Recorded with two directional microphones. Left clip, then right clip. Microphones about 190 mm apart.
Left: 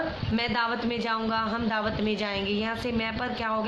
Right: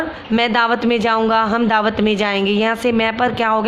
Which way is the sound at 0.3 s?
55° right (ahead or behind).